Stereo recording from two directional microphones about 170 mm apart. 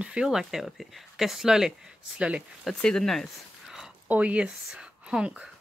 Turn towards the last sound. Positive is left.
turn(degrees=-5)  # may be behind; listen again after turning